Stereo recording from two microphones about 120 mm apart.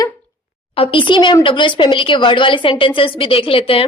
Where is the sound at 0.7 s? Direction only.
50° left (ahead or behind).